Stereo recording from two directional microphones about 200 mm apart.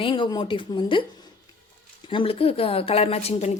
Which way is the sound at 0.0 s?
25° left (ahead or behind).